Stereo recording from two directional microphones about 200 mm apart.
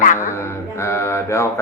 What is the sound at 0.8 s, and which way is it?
Speech, 15° left (ahead or behind).